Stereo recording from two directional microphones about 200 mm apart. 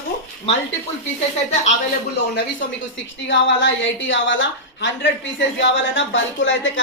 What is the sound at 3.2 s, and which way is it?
A woman's voice, 65° left (ahead or behind).